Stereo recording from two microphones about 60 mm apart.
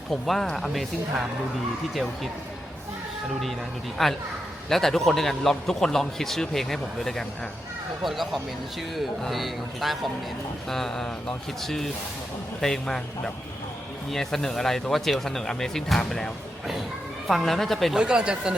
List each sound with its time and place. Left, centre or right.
0.1 s speech: centre
4.0 s a man's voice: centre
17.9 s speech: centre